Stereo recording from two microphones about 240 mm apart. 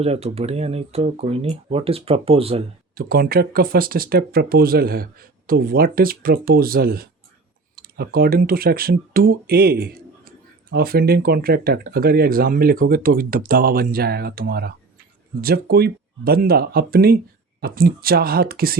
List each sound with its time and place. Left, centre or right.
0.0 s speech: right
2.9 s speech: right